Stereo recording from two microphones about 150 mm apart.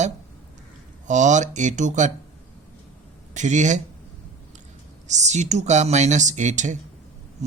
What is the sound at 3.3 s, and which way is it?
Speech, 55° right (ahead or behind).